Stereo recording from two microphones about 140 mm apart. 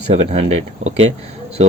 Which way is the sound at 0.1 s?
45° right (ahead or behind).